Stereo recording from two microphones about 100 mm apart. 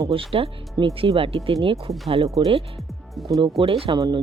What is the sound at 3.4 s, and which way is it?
Speech, 65° right (ahead or behind).